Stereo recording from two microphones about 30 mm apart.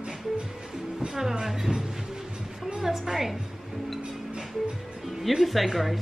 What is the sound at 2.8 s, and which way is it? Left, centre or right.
Speech, centre.